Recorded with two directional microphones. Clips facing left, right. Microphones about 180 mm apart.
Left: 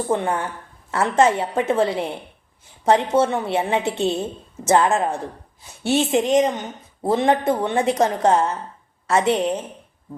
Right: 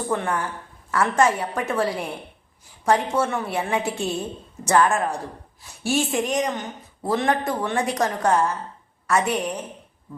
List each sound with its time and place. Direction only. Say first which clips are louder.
0.1 s a woman's voice: left 2 dB; 25° left (ahead or behind)